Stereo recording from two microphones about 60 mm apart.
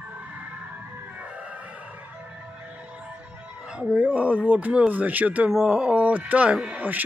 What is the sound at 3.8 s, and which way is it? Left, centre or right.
Speech, right.